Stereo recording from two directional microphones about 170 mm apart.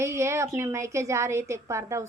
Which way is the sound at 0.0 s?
15° right (ahead or behind).